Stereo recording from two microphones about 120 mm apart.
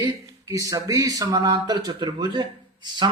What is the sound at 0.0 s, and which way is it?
Speech, 30° right (ahead or behind).